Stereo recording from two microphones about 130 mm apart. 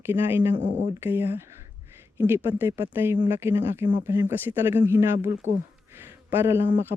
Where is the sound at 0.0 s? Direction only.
20° right (ahead or behind).